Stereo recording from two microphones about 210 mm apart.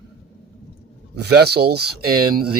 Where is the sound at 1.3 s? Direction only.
50° right (ahead or behind).